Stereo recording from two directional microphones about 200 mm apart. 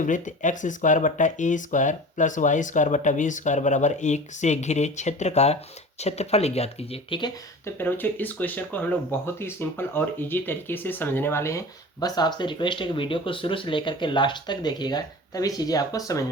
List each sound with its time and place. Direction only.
0.0 s speech: 40° left (ahead or behind); by 16.2 s 15° left (ahead or behind)